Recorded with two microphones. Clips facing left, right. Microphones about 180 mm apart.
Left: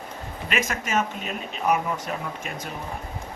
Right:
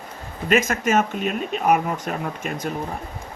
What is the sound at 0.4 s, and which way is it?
Speech, 45° right (ahead or behind).